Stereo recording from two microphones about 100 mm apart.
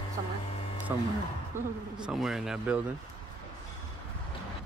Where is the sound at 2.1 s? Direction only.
5° right (ahead or behind).